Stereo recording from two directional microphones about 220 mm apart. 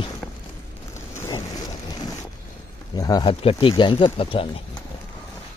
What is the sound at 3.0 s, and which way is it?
Speech, 15° left (ahead or behind).